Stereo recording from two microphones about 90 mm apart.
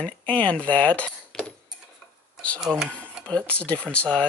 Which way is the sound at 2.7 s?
5° right (ahead or behind).